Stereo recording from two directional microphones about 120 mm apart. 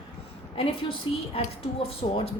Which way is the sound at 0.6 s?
55° left (ahead or behind).